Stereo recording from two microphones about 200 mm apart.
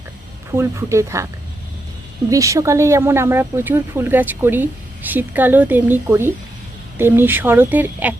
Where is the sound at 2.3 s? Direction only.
15° right (ahead or behind).